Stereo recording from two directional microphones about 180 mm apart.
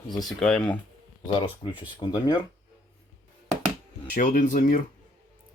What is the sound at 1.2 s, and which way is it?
Speech, 25° left (ahead or behind).